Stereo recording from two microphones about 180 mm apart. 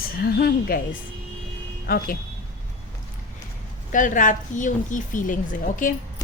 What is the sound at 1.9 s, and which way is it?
Speech, 55° left (ahead or behind).